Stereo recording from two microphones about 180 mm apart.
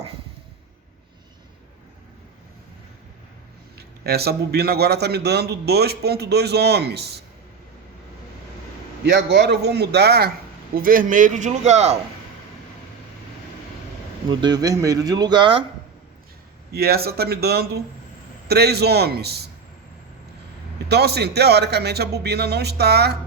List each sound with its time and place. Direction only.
3.8 s a man's voice: 60° right (ahead or behind)
9.0 s a man's voice: 70° right (ahead or behind)
10.8 s a man's voice: 50° right (ahead or behind)
14.3 s speech: 20° right (ahead or behind)
16.7 s a man's voice: 60° right (ahead or behind)
20.8 s a man's voice: 65° right (ahead or behind)